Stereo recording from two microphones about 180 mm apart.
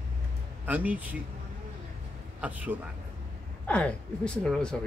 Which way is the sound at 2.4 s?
10° right (ahead or behind).